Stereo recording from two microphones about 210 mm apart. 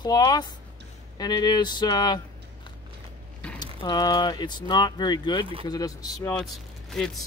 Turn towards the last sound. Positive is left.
turn(degrees=0)  # may be behind; listen again after turning